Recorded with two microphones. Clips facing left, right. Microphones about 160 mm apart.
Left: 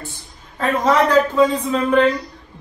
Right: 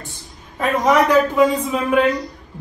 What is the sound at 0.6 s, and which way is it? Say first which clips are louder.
Speech: right 1 dB; 15° right (ahead or behind).